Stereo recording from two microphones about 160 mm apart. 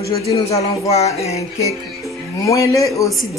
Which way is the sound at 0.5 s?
40° left (ahead or behind).